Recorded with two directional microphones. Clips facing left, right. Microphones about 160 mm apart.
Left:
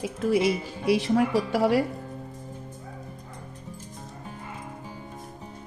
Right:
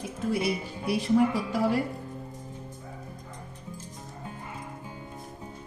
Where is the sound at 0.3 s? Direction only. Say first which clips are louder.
Left 5 dB; 90° left; by 1.8 s 75° left (ahead or behind).